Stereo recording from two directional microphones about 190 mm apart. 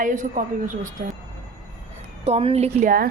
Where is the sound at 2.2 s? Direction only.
35° right (ahead or behind).